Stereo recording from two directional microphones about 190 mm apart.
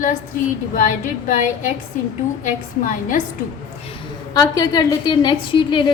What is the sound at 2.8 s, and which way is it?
Speech, 45° left (ahead or behind).